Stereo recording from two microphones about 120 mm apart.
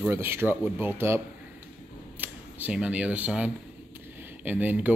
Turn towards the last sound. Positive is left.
turn(degrees=-15)  # may be behind; listen again after turning